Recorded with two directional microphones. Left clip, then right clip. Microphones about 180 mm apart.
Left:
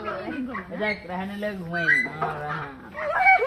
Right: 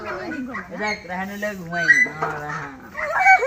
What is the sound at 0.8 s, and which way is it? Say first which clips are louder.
Speech: right 2 dB; 5° right (ahead or behind).